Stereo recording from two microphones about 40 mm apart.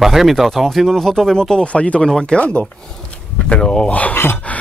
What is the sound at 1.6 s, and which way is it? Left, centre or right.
Speech, left.